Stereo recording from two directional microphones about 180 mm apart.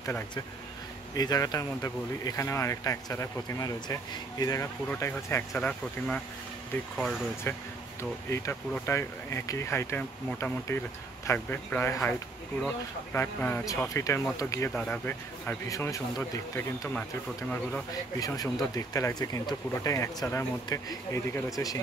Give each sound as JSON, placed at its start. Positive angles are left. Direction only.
{"t": 1.1, "sound": "speech", "side_deg": 20}
{"t": 7.5, "sound": "speech", "side_deg": 10}